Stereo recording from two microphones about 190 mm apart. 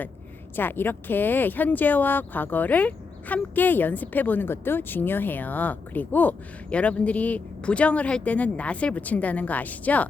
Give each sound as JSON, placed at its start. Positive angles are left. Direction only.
{"t": 0.5, "sound": "speech", "side_deg": 10}